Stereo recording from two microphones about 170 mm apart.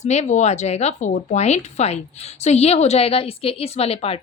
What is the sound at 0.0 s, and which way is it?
A woman's voice, 40° left (ahead or behind).